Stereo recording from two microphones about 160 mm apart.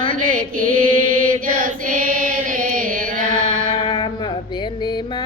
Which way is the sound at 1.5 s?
55° right (ahead or behind).